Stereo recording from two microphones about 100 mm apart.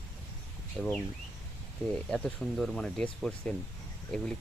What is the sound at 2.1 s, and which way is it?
Speech, 5° left (ahead or behind).